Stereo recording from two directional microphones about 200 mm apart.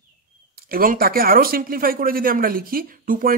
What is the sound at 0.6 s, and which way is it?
Speech, 45° right (ahead or behind).